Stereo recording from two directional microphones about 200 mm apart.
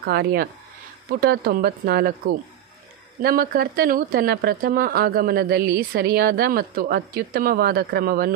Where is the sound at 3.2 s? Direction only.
50° right (ahead or behind).